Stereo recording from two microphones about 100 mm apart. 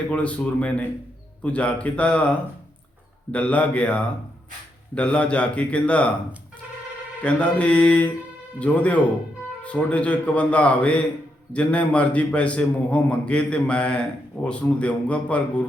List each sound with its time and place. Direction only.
0.1 s a man's voice: 15° left (ahead or behind)
3.3 s a man's voice: 15° left (ahead or behind)
7.2 s a man's voice: 15° left (ahead or behind)